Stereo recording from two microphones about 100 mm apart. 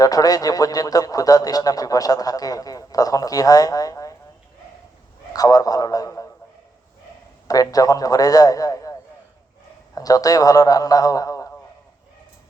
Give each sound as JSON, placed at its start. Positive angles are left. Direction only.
{"t": 0.0, "sound": "a man's voice", "side_deg": 40}
{"t": 5.3, "sound": "a man's voice", "side_deg": 40}
{"t": 7.4, "sound": "a man's voice", "side_deg": 35}